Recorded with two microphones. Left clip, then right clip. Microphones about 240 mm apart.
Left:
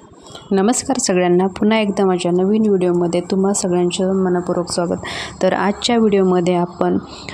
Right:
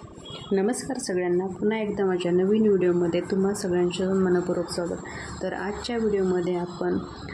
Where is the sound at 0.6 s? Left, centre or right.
Left.